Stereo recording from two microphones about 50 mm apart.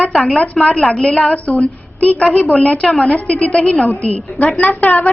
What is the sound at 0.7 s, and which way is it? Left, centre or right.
Speech, centre.